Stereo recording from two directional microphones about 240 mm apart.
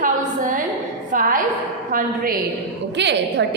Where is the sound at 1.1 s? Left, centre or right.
Right.